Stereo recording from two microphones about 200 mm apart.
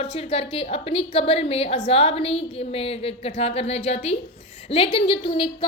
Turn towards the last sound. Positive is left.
turn(degrees=25)  # may be behind; listen again after turning